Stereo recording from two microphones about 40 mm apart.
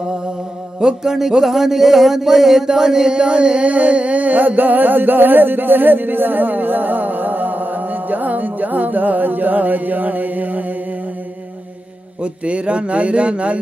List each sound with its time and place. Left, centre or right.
0.7 s music: centre
1.1 s speech: centre; by 10.6 s right
12.2 s a man's voice: right